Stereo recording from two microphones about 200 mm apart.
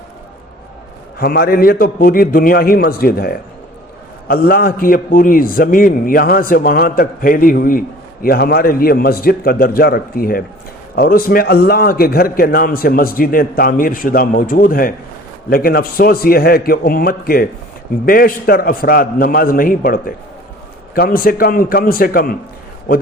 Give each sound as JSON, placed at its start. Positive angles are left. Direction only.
{"t": 1.2, "sound": "a man's voice", "side_deg": 50}